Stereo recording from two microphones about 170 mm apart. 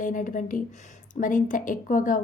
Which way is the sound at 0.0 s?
50° left (ahead or behind).